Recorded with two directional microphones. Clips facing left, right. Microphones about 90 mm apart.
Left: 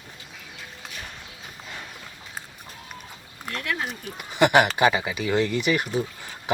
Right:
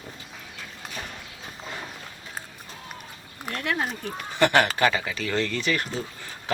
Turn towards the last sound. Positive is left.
turn(degrees=15)  # may be behind; listen again after turning